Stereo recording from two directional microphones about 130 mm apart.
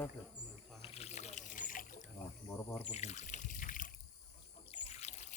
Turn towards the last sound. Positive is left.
turn(degrees=60)  # may be behind; listen again after turning